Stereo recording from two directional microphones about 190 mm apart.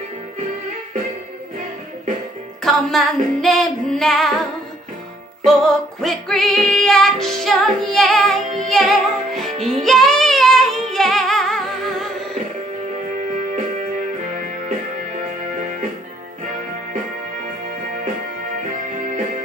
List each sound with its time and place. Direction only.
2.6 s music: centre (ahead or behind)
5.4 s music: centre (ahead or behind)
9.5 s music: 40° right (ahead or behind)
9.8 s music: centre (ahead or behind)
14.3 s music: 45° right (ahead or behind)
18.9 s music: 40° right (ahead or behind)